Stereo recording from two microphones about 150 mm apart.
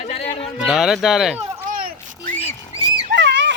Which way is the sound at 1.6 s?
70° right (ahead or behind).